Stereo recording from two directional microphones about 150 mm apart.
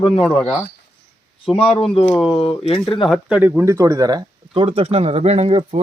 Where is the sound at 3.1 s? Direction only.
10° right (ahead or behind).